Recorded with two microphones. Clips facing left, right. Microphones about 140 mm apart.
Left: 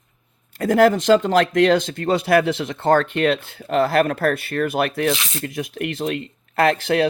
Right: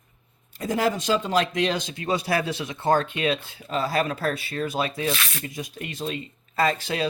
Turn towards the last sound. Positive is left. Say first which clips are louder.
# left 7 dB
turn(degrees=60)  # may be behind; listen again after turning